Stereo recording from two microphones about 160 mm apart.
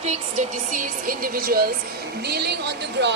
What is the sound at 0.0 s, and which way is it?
Speech, 45° right (ahead or behind).